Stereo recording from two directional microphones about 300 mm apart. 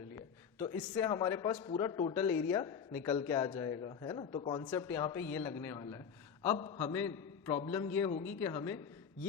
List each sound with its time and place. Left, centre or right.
0.2 s a man's voice: centre